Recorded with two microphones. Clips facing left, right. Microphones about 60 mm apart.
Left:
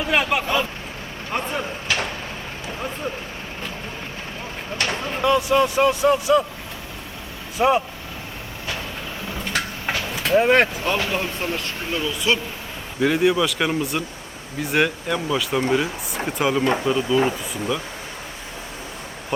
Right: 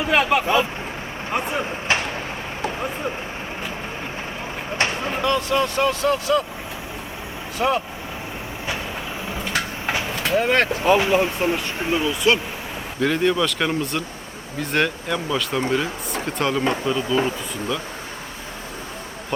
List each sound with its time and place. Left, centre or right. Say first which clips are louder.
0.0 s vehicle: right 2 dB; centre
0.4 s speech: right 3 dB; centre
1.9 s a sound: right 2 dB; right
2.6 s vehicle: right 3 dB; centre
4.8 s a sound: right 2 dB; right
5.2 s speech: left 4 dB; centre
7.6 s speech: left 3 dB; centre
9.4 s a sound: even; centre
10.3 s speech: left 3 dB; centre
10.8 s speech: right 6 dB; centre
13.0 s speech: left 1 dB; centre